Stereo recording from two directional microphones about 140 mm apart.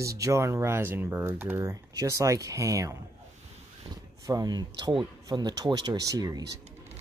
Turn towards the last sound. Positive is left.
turn(degrees=-25)  # may be behind; listen again after turning